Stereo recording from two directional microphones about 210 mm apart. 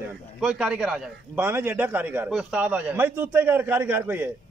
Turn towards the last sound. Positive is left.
turn(degrees=-10)  # may be behind; listen again after turning